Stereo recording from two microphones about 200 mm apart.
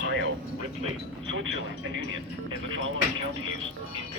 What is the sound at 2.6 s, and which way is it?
Speech, 75° right (ahead or behind).